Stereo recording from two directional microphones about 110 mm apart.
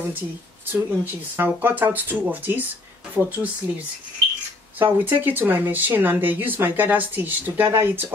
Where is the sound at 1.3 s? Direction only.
20° right (ahead or behind).